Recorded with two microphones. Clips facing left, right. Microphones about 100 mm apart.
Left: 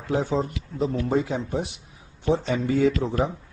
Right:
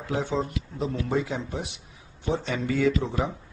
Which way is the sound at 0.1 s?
35° left (ahead or behind).